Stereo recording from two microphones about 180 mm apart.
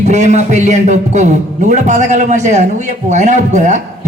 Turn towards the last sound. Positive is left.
turn(degrees=-40)  # may be behind; listen again after turning